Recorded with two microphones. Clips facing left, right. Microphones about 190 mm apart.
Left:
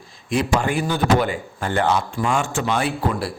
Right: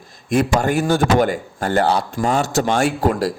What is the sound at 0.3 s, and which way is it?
A man's voice, 45° right (ahead or behind).